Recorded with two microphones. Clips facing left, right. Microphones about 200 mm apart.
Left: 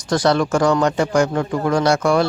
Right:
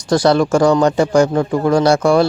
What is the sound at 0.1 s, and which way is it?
Speech, 35° right (ahead or behind).